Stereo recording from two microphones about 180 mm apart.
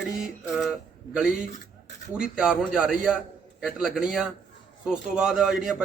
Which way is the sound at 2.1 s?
5° right (ahead or behind).